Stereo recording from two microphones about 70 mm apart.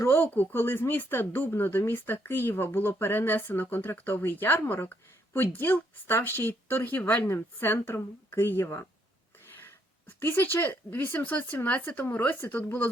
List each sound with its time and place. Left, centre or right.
0.0 s speech: left
10.2 s speech: left